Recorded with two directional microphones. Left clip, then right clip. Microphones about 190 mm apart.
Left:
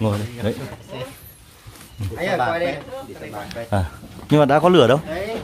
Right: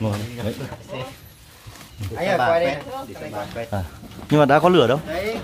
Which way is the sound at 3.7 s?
25° left (ahead or behind).